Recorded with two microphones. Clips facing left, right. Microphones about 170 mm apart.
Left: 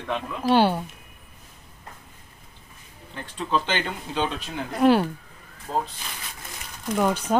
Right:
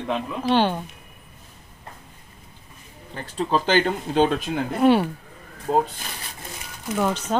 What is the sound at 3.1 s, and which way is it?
Speech, 40° right (ahead or behind).